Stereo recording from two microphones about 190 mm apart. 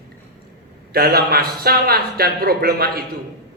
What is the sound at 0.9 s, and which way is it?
A man's voice, 55° right (ahead or behind).